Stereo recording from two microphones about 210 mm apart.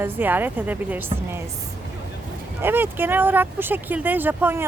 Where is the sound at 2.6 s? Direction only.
10° right (ahead or behind).